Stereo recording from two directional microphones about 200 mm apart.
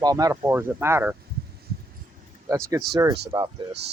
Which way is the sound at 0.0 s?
15° right (ahead or behind).